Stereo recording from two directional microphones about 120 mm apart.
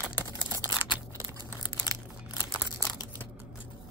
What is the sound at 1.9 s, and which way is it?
Crumpling, 30° left (ahead or behind).